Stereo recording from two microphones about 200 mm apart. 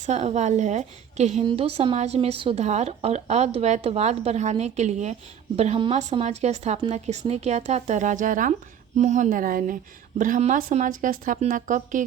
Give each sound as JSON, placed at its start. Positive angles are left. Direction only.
{"t": 0.0, "sound": "a woman's voice", "side_deg": -35}